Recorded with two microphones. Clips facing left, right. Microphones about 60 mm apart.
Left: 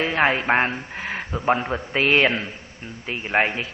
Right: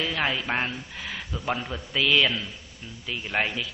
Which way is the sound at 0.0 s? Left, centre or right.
Left.